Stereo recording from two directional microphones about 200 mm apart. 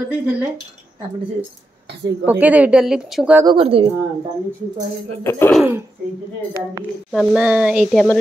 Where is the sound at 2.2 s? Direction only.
10° right (ahead or behind).